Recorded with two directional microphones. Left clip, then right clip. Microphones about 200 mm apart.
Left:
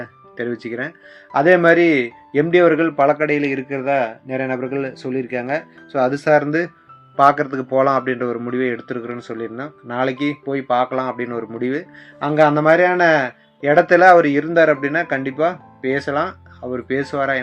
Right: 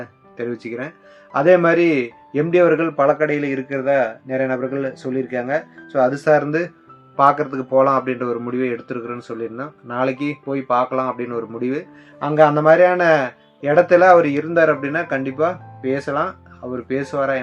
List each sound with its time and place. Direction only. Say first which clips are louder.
0.0 s speech: left 1 dB; 20° left (ahead or behind)